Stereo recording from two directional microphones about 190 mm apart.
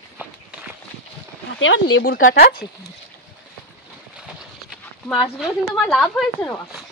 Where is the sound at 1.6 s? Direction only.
80° left; by 2.6 s 50° left (ahead or behind).